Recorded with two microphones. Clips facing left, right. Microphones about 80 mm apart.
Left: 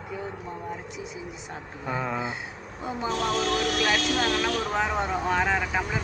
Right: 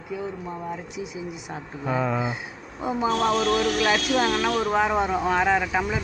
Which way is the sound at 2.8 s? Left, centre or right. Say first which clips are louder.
Right 5 dB; centre.